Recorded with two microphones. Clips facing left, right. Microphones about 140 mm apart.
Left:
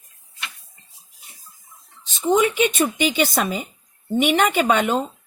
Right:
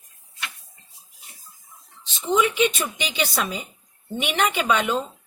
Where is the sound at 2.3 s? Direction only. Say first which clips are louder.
Left 3 dB; 50° left (ahead or behind).